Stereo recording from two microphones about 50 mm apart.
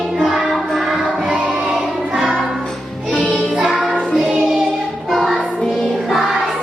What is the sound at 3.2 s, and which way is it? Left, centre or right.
Music, centre.